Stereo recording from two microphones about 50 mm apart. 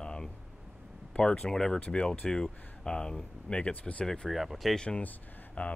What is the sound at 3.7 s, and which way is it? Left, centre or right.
Speech, left.